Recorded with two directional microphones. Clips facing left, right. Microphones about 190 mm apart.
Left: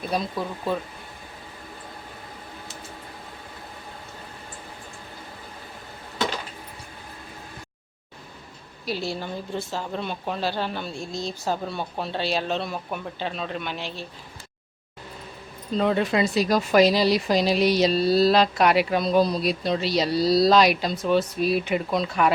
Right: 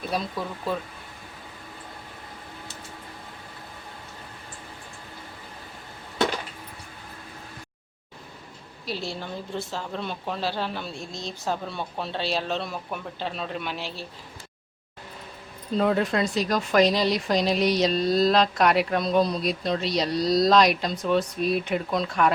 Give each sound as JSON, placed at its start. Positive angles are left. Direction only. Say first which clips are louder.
{"t": 0.1, "sound": "speech", "louder": "left 3 dB", "side_deg": 0}
{"t": 8.9, "sound": "speech", "louder": "left 3 dB", "side_deg": 5}
{"t": 15.7, "sound": "speech", "louder": "left 1 dB", "side_deg": 0}